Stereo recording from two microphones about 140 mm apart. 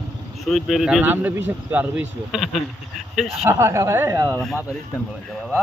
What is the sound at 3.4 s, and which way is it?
Speech, 20° right (ahead or behind).